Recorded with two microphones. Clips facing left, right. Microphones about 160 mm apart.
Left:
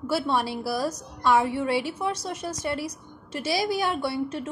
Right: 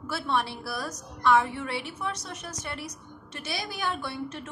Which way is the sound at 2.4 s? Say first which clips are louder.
Left 8 dB; 30° left (ahead or behind).